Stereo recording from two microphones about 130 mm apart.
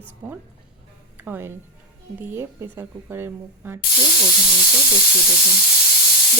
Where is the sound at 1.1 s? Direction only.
15° right (ahead or behind).